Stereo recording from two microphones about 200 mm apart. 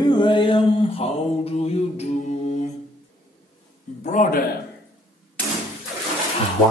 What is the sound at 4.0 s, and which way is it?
Speech, 40° left (ahead or behind).